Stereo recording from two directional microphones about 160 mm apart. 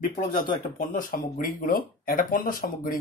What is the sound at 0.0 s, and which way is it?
Speech, 55° left (ahead or behind).